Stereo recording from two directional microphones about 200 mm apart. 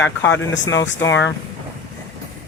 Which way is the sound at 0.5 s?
70° left (ahead or behind).